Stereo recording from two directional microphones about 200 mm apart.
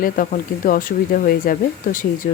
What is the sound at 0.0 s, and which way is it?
Speech, 45° left (ahead or behind).